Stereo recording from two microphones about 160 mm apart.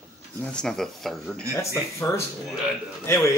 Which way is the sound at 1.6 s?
15° left (ahead or behind).